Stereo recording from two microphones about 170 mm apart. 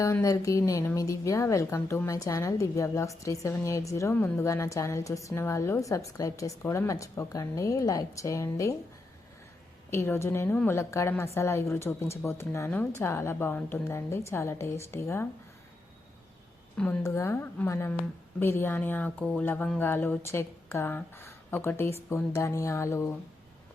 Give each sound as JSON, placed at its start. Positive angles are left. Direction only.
{"t": 0.0, "sound": "speech", "side_deg": 20}
{"t": 9.9, "sound": "speech", "side_deg": 15}
{"t": 16.7, "sound": "speech", "side_deg": 5}